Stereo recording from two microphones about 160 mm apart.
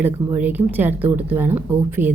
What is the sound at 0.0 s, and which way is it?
Speech, 10° right (ahead or behind).